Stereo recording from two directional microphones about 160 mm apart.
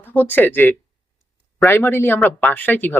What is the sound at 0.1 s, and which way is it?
Speech, 10° left (ahead or behind).